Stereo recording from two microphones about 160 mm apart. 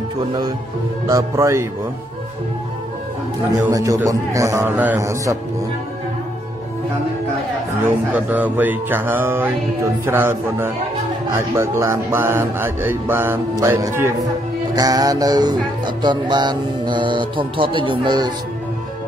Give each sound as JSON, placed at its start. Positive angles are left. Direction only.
{"t": 1.0, "sound": "music", "side_deg": -20}
{"t": 3.6, "sound": "music", "side_deg": -20}
{"t": 8.1, "sound": "speech", "side_deg": -10}
{"t": 14.8, "sound": "music", "side_deg": -25}